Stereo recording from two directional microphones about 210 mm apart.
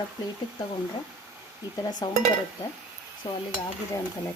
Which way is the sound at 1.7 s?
20° left (ahead or behind).